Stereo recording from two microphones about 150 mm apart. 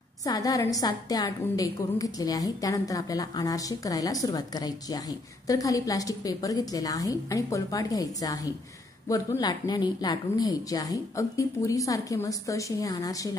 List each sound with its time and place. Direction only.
0.2 s a woman's voice: 25° left (ahead or behind)